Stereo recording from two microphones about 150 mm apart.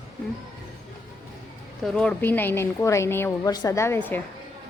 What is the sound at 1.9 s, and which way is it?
A woman's voice, 10° left (ahead or behind).